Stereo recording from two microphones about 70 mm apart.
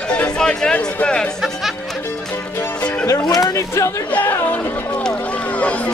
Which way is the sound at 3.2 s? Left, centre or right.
Left.